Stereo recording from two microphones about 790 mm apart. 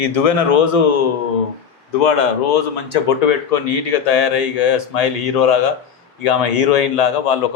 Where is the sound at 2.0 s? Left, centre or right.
Left.